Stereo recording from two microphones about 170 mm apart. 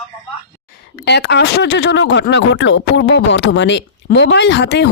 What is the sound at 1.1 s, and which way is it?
Speech, 85° left.